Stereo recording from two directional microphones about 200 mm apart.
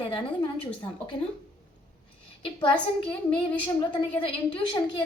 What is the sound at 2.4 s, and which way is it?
A woman's voice, 25° left (ahead or behind).